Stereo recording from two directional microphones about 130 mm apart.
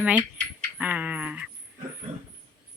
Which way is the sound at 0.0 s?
10° right (ahead or behind).